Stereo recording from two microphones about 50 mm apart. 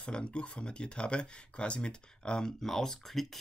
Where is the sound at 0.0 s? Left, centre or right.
Left.